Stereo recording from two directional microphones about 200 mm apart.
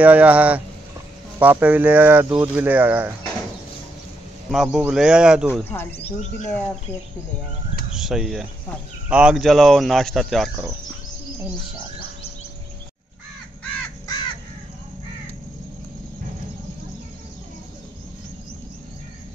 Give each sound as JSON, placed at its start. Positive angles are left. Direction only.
{"t": 0.0, "sound": "speech", "side_deg": -5}
{"t": 2.2, "sound": "speech", "side_deg": -20}
{"t": 2.5, "sound": "speech", "side_deg": -10}
{"t": 4.5, "sound": "speech", "side_deg": 0}
{"t": 5.9, "sound": "speech", "side_deg": 30}
{"t": 7.9, "sound": "speech", "side_deg": 0}